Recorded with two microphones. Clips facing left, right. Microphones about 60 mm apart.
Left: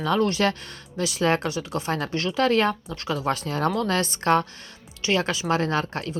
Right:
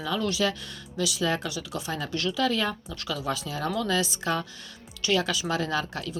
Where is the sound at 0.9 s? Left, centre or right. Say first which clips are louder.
Left 4 dB; left.